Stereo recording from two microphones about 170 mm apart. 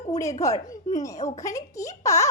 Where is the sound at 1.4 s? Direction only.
20° left (ahead or behind).